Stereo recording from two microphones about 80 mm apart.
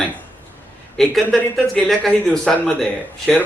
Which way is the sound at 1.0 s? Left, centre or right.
Centre.